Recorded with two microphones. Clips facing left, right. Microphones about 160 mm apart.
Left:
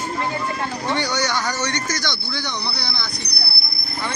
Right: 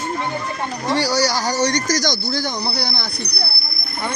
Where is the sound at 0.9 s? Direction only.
35° right (ahead or behind).